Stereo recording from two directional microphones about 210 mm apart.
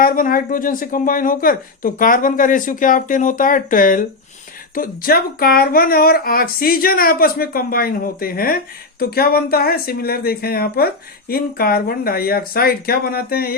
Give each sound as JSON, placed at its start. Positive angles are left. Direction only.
{"t": 0.0, "sound": "speech", "side_deg": 40}